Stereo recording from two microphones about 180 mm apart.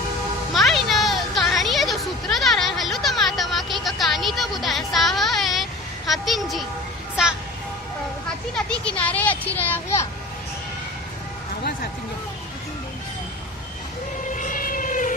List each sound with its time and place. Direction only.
0.5 s a sound: centre (ahead or behind)
8.5 s a child's voice: 5° left (ahead or behind)
14.3 s vehicle: 45° left (ahead or behind)